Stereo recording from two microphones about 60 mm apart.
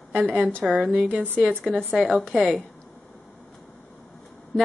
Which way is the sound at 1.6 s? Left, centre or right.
Centre.